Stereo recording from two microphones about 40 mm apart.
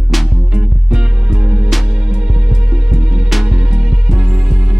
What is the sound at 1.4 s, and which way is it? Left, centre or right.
Music, right.